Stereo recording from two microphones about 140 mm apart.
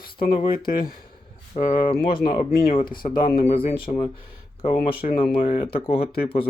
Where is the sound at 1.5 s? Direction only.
40° left (ahead or behind).